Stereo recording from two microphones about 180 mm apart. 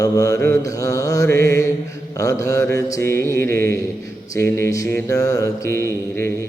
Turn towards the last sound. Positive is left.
turn(degrees=15)  # may be behind; listen again after turning